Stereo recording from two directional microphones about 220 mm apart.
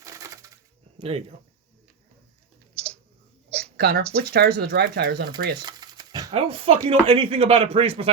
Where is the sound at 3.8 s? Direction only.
45° right (ahead or behind).